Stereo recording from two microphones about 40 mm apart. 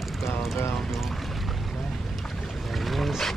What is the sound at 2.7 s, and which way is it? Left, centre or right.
Boat, centre.